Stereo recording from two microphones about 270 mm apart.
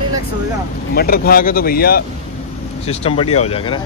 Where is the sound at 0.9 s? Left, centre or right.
Left.